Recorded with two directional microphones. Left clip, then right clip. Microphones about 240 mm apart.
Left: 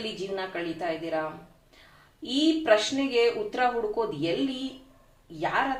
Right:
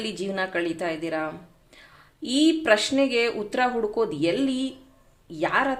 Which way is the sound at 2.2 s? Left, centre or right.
Right.